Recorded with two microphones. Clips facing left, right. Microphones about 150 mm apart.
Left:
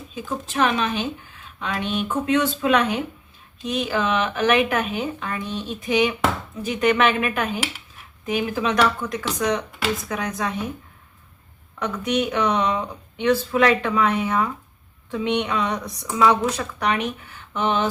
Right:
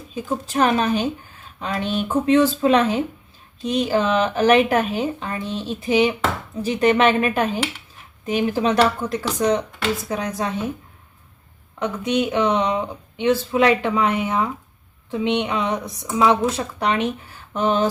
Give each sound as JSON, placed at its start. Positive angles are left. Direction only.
{"t": 0.1, "sound": "speech", "side_deg": -40}
{"t": 11.8, "sound": "speech", "side_deg": -20}